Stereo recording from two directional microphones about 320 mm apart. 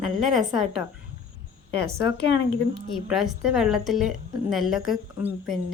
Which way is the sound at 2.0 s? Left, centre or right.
Left.